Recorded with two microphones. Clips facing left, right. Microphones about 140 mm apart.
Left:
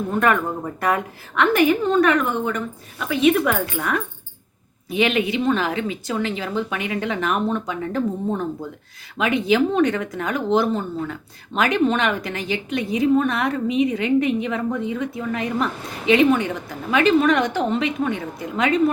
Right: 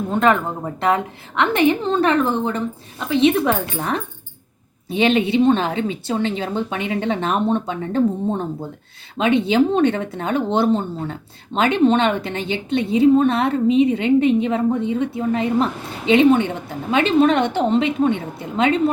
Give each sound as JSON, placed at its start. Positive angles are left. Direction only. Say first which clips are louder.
{"t": 0.1, "sound": "speech", "louder": "right 3 dB", "side_deg": -25}